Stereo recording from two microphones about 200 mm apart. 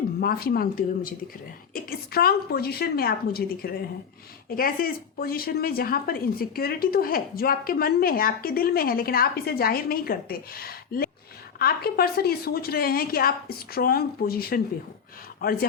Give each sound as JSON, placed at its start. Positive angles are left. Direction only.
{"t": 0.2, "sound": "speech", "side_deg": 50}